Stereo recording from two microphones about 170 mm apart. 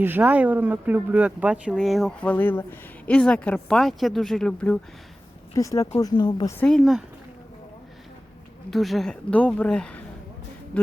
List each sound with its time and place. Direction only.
0.0 s speech: 10° right (ahead or behind); by 4.8 s 5° left (ahead or behind)
5.5 s speech: 20° left (ahead or behind)
6.6 s speech: centre (ahead or behind)
8.7 s speech: centre (ahead or behind)